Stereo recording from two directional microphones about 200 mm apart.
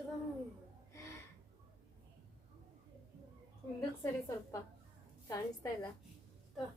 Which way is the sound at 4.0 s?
15° left (ahead or behind).